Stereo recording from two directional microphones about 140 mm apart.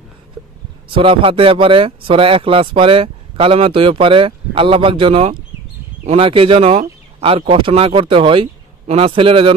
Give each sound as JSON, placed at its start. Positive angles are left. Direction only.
{"t": 0.9, "sound": "speech", "side_deg": -40}